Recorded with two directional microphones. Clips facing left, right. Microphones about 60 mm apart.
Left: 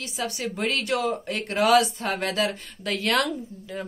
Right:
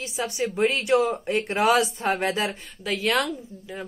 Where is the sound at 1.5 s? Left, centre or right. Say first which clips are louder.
Left 2 dB; right.